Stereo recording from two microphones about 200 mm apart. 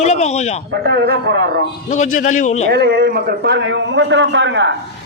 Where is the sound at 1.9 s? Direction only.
40° left (ahead or behind).